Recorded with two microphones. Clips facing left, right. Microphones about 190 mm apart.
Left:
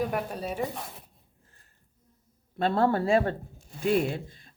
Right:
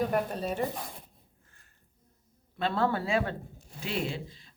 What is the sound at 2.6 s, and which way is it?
Speech, 50° left (ahead or behind).